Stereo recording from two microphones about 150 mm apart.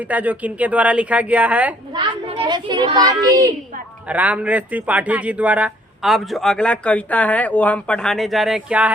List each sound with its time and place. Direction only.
0.0 s speech: 10° right (ahead or behind)
1.9 s a child's voice: 30° right (ahead or behind)
4.0 s speech: 10° right (ahead or behind)